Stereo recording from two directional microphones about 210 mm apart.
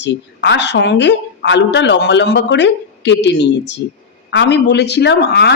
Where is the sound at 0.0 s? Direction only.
55° left (ahead or behind).